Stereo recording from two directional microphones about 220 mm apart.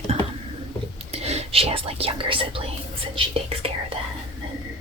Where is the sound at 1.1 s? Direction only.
30° right (ahead or behind).